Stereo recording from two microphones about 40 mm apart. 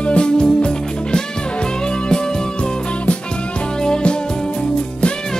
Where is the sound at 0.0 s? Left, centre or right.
Left.